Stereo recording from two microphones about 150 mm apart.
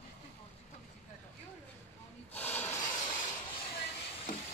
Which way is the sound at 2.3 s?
10° left (ahead or behind).